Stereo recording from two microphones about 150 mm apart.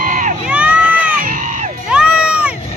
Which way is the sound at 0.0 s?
60° right (ahead or behind).